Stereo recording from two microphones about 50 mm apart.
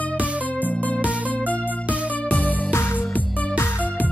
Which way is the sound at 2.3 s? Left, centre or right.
Left.